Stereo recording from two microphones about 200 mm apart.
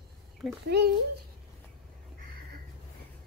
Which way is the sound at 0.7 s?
55° right (ahead or behind).